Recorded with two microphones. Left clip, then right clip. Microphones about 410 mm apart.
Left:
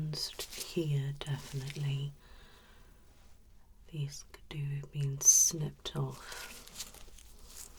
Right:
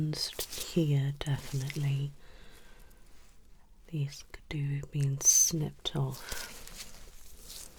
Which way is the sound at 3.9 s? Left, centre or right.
Right.